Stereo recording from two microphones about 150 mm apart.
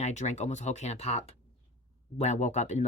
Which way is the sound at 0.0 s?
50° left (ahead or behind).